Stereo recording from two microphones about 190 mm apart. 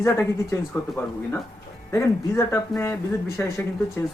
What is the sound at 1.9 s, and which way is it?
Speech, 15° left (ahead or behind).